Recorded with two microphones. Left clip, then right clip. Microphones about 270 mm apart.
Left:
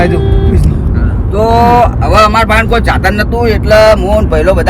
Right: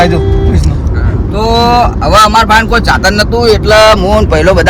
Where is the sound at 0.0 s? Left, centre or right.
Right.